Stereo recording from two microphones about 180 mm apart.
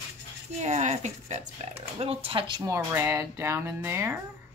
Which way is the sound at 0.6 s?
40° right (ahead or behind).